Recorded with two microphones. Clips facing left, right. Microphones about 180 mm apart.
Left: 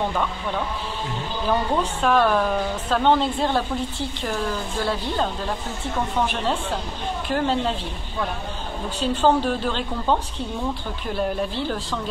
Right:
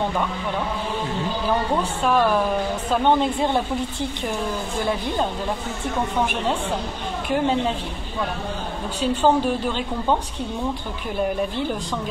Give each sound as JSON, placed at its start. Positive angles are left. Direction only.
{"t": 1.8, "sound": "a woman's voice", "side_deg": -10}
{"t": 4.8, "sound": "a woman's voice", "side_deg": -15}
{"t": 7.3, "sound": "a woman's voice", "side_deg": -10}
{"t": 9.0, "sound": "a woman's voice", "side_deg": -10}